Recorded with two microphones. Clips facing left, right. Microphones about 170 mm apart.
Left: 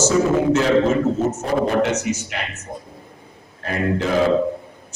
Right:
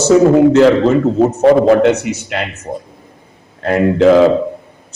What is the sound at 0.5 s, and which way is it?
A man's voice, 65° right (ahead or behind).